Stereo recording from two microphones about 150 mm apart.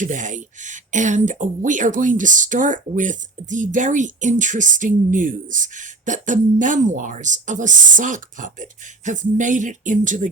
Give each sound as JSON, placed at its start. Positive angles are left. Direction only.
{"t": 0.0, "sound": "speech", "side_deg": -60}